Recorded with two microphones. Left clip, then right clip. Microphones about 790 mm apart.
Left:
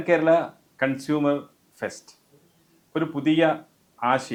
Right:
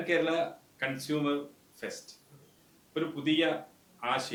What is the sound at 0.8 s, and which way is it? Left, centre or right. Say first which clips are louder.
Speech: left 9 dB; left.